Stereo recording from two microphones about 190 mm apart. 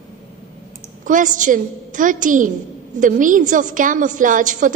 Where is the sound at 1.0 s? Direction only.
45° right (ahead or behind).